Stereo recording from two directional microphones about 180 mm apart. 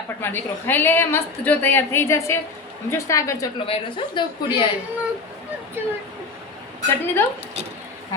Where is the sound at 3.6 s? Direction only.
30° left (ahead or behind).